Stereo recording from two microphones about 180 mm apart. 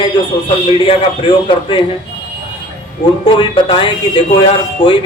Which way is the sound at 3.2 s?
25° left (ahead or behind).